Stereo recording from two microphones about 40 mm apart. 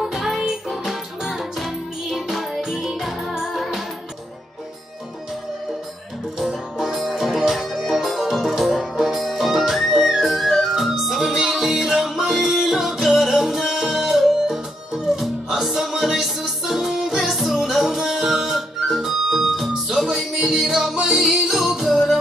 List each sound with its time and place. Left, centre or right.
0.0 s music: centre
6.3 s music: centre